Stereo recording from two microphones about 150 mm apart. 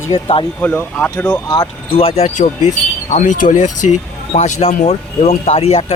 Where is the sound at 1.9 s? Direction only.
40° left (ahead or behind).